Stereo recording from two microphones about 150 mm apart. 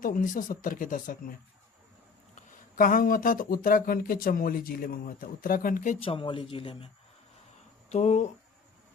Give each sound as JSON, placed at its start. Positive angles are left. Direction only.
{"t": 0.0, "sound": "speech", "side_deg": 65}
{"t": 2.3, "sound": "speech", "side_deg": 65}
{"t": 6.1, "sound": "a man's voice", "side_deg": 35}
{"t": 7.9, "sound": "speech", "side_deg": 50}